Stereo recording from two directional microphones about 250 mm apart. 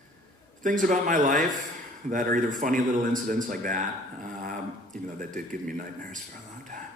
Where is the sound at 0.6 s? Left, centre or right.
Right.